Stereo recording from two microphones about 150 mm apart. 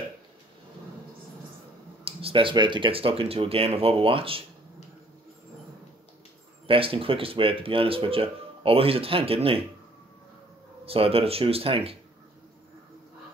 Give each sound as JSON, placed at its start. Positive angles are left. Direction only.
{"t": 2.0, "sound": "speech", "side_deg": -35}
{"t": 6.7, "sound": "speech", "side_deg": -35}
{"t": 10.9, "sound": "speech", "side_deg": -40}